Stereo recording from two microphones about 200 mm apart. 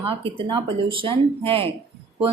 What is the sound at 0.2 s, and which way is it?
A woman's voice, 25° right (ahead or behind).